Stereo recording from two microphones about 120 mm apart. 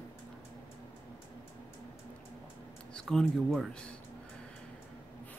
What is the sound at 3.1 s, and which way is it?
Speech, centre (ahead or behind).